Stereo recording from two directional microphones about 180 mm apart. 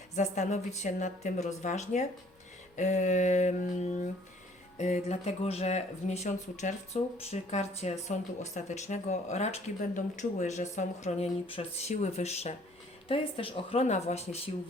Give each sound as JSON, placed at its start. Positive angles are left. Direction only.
{"t": 0.2, "sound": "speech", "side_deg": 40}
{"t": 2.7, "sound": "a sound", "side_deg": 45}
{"t": 4.8, "sound": "speech", "side_deg": 40}